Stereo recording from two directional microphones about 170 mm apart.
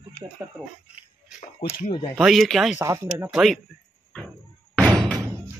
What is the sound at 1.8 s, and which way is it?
Speech, 25° left (ahead or behind).